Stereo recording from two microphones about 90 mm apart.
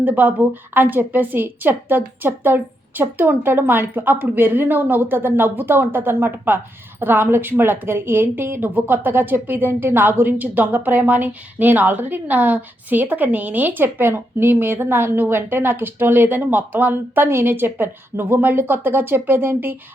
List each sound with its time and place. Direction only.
0.0 s a woman's voice: 20° right (ahead or behind)